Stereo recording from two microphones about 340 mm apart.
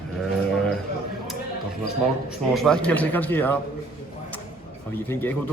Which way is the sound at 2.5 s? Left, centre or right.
Centre.